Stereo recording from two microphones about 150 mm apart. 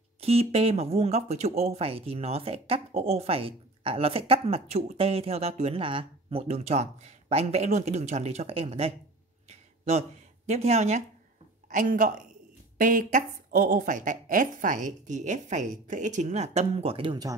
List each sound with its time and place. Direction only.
0.2 s speech: 40° right (ahead or behind)
9.5 s a sound: 45° right (ahead or behind)
11.7 s a woman's voice: 60° right (ahead or behind); by 17.4 s 30° right (ahead or behind)